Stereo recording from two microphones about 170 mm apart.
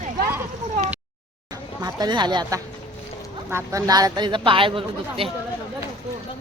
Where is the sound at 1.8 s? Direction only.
20° right (ahead or behind).